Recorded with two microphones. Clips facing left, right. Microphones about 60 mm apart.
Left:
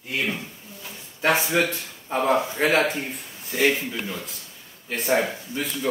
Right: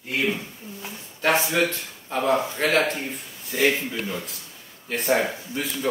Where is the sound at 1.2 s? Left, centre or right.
Centre.